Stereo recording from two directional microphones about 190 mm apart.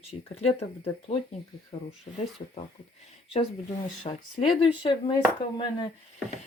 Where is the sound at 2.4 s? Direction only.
35° left (ahead or behind).